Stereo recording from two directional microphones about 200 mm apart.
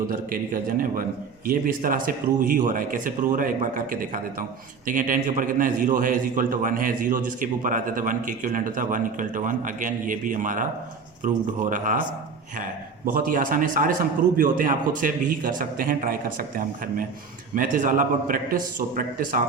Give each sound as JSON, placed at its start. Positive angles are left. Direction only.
{"t": 0.1, "sound": "a man's voice", "side_deg": -45}
{"t": 13.1, "sound": "speech", "side_deg": -45}